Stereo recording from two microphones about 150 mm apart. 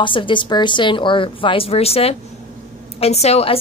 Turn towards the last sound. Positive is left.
turn(degrees=45)  # may be behind; listen again after turning